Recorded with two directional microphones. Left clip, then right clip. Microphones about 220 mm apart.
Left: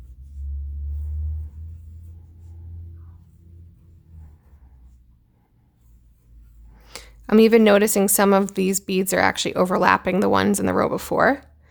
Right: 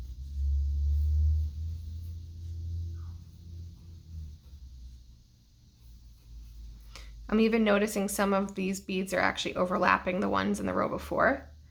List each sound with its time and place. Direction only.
6.8 s speech: 45° left (ahead or behind)